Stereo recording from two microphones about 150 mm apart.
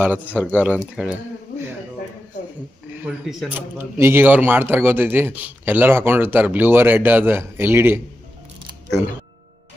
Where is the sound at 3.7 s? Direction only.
15° right (ahead or behind).